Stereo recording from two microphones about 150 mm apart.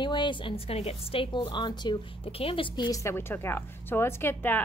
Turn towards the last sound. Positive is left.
turn(degrees=15)  # may be behind; listen again after turning